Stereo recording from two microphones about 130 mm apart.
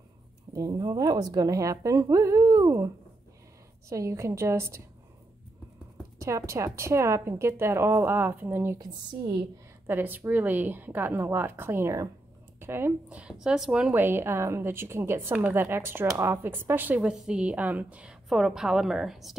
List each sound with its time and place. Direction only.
0.5 s a woman's voice: 30° right (ahead or behind)
3.9 s a woman's voice: 25° right (ahead or behind)
6.1 s a woman's voice: 25° right (ahead or behind)
9.8 s a woman's voice: 15° right (ahead or behind)